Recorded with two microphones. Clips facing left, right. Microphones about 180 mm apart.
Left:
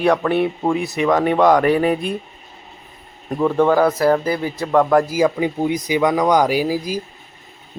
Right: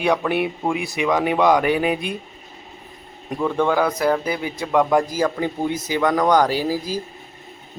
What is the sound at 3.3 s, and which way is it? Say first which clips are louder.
Speech: left 4 dB; 5° left (ahead or behind).